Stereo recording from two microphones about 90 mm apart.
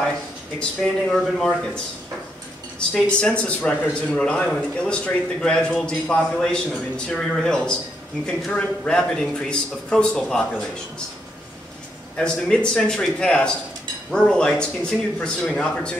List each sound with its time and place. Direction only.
0.6 s a man's voice: 5° left (ahead or behind)
2.9 s a man's voice: 10° left (ahead or behind)
12.2 s a man's voice: 10° left (ahead or behind)